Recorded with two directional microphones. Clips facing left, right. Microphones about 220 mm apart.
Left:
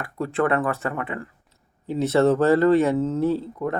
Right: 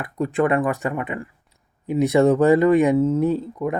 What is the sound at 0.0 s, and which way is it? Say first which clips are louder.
Speech: right 3 dB; 15° right (ahead or behind).